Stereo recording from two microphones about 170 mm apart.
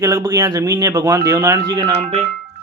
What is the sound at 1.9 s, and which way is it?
Speech, 35° right (ahead or behind).